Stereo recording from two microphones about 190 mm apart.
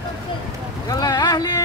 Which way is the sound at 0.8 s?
20° left (ahead or behind).